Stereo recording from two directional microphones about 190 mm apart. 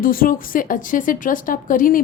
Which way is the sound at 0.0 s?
50° left (ahead or behind).